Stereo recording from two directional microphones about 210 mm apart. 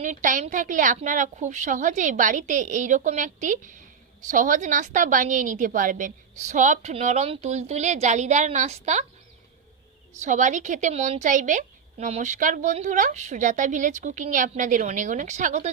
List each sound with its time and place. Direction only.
0.0 s a woman's voice: 35° right (ahead or behind)
10.2 s a woman's voice: 35° right (ahead or behind)